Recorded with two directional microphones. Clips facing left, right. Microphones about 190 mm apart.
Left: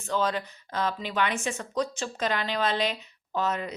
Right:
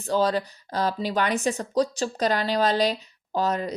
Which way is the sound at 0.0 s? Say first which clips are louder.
Right 5 dB; 35° right (ahead or behind).